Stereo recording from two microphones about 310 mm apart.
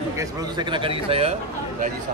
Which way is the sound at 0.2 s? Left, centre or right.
Centre.